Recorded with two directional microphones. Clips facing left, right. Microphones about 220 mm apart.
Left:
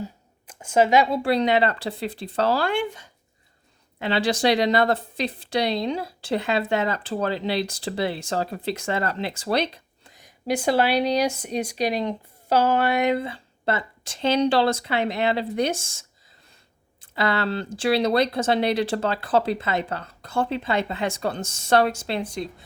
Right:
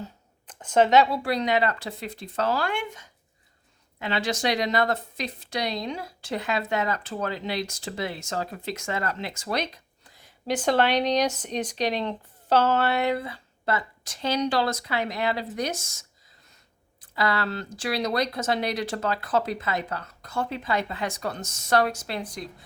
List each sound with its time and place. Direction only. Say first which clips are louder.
0.0 s shuffling cards: left 5 dB; 10° left (ahead or behind)
1.1 s speech: left 4 dB; 30° left (ahead or behind)